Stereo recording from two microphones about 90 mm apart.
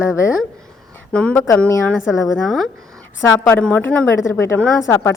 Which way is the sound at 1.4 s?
30° left (ahead or behind).